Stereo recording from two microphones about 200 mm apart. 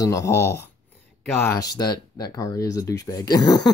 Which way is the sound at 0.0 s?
15° left (ahead or behind).